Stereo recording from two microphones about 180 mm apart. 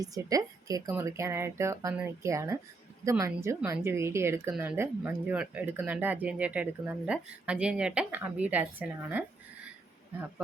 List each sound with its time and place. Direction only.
0.0 s speech: 20° right (ahead or behind)